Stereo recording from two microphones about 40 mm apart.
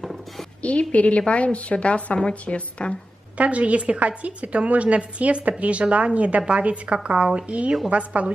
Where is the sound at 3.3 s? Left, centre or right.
Right.